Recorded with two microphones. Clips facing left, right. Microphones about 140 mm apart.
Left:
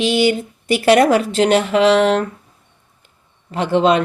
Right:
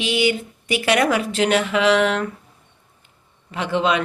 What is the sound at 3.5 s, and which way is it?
Speech, 35° left (ahead or behind).